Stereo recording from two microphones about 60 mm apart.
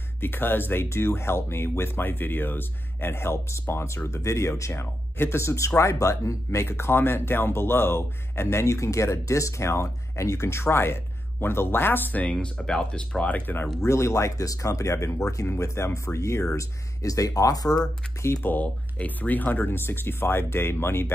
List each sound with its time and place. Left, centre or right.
0.2 s speech: left
6.9 s speech: left
12.3 s speech: centre
13.7 s speech: left
16.5 s speech: left
18.4 s speech: left